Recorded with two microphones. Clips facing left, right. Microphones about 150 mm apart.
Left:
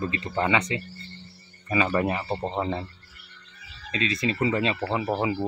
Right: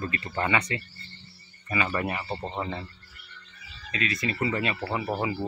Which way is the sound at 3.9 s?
25° left (ahead or behind).